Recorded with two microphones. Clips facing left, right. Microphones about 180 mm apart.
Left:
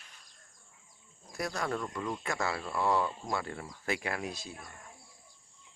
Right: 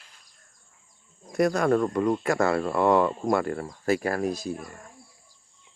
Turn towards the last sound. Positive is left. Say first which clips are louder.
# right 13 dB
turn(degrees=0)  # may be behind; listen again after turning